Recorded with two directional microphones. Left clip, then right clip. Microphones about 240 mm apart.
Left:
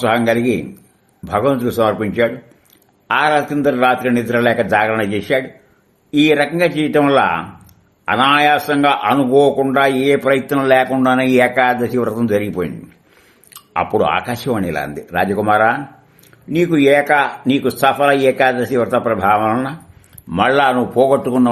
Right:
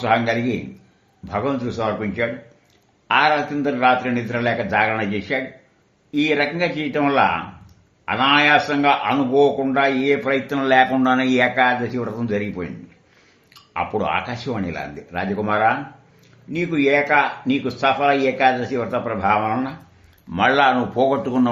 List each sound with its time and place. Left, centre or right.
0.0 s a man's voice: left